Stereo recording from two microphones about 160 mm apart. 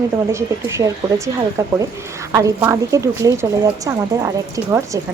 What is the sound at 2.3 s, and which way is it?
Speech, 20° right (ahead or behind).